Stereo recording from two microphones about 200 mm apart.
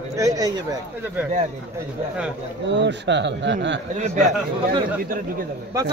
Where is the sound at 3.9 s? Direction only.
35° right (ahead or behind).